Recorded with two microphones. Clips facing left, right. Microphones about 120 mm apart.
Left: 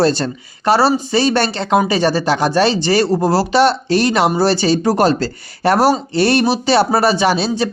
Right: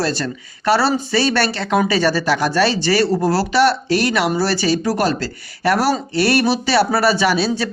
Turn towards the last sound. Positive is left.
turn(degrees=20)  # may be behind; listen again after turning